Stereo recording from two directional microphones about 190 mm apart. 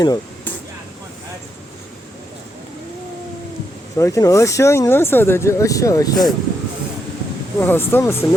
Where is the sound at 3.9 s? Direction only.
15° left (ahead or behind).